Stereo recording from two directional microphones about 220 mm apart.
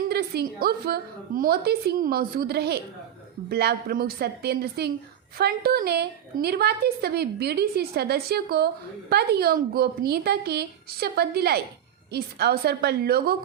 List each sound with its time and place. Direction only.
0.1 s a woman's voice: 45° right (ahead or behind)